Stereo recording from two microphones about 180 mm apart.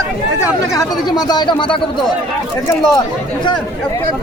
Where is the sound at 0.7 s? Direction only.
20° left (ahead or behind).